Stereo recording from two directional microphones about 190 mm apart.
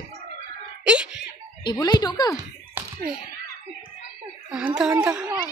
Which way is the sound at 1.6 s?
25° left (ahead or behind).